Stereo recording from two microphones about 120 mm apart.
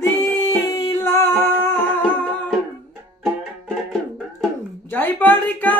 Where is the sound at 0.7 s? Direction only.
25° left (ahead or behind).